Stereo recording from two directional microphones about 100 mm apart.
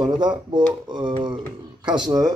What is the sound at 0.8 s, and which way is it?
Speech, 50° right (ahead or behind).